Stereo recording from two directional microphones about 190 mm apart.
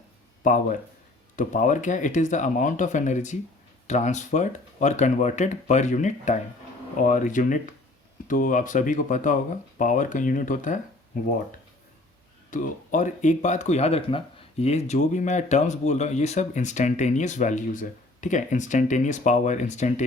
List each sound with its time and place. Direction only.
0.4 s speech: 40° left (ahead or behind)
12.5 s speech: 45° left (ahead or behind)